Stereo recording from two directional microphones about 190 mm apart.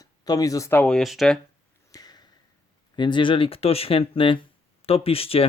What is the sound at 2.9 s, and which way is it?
Speech, 25° left (ahead or behind).